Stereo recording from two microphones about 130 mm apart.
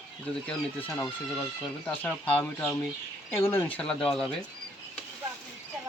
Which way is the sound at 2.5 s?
25° left (ahead or behind).